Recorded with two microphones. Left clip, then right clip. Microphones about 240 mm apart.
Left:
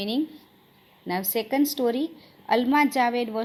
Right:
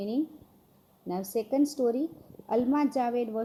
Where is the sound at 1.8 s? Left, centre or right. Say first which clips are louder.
Left 3 dB; left.